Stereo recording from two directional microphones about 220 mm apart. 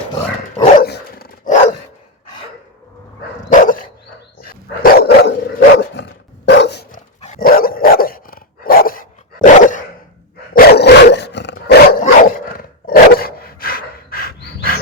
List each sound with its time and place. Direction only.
0.8 s dog: 45° left (ahead or behind)
3.5 s dog: 35° left (ahead or behind)
7.2 s dog: 35° left (ahead or behind)